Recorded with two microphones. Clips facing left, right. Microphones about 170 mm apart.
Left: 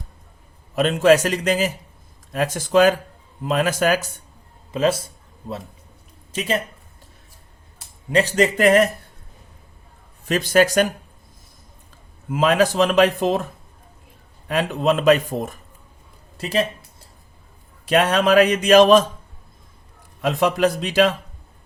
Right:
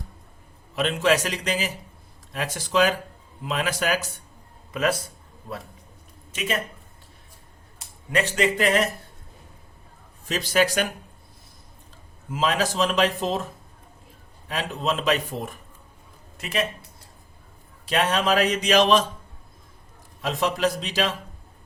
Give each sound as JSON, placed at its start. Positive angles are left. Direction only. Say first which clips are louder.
{"t": 0.8, "sound": "speech", "louder": "left 7 dB", "side_deg": 45}
{"t": 4.7, "sound": "speech", "louder": "left 5 dB", "side_deg": 25}
{"t": 6.3, "sound": "speech", "louder": "left 5 dB", "side_deg": 35}
{"t": 8.1, "sound": "speech", "louder": "left 5 dB", "side_deg": 40}
{"t": 10.2, "sound": "speech", "louder": "left 5 dB", "side_deg": 55}
{"t": 12.3, "sound": "a man's voice", "louder": "left 7 dB", "side_deg": 55}
{"t": 14.4, "sound": "speech", "louder": "left 7 dB", "side_deg": 55}
{"t": 16.4, "sound": "speech", "louder": "left 5 dB", "side_deg": 35}
{"t": 17.8, "sound": "speech", "louder": "left 5 dB", "side_deg": 55}
{"t": 20.2, "sound": "a man's voice", "louder": "left 5 dB", "side_deg": 55}